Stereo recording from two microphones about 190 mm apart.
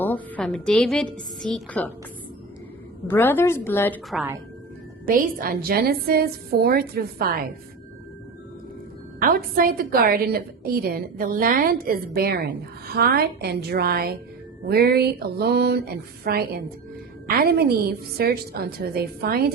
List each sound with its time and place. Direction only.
0.0 s a woman's voice: 10° left (ahead or behind)
3.1 s a woman's voice: 10° left (ahead or behind)
5.0 s a woman's voice: 50° right (ahead or behind)
9.2 s a woman's voice: 50° right (ahead or behind)